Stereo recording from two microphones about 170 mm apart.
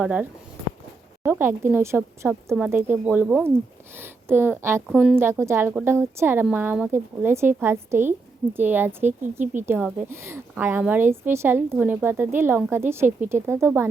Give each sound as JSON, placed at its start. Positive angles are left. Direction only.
{"t": 0.0, "sound": "a woman's voice", "side_deg": -10}
{"t": 4.9, "sound": "speech", "side_deg": 0}
{"t": 5.1, "sound": "a woman's voice", "side_deg": -15}
{"t": 9.4, "sound": "speech", "side_deg": -50}
{"t": 9.6, "sound": "a woman's voice", "side_deg": -10}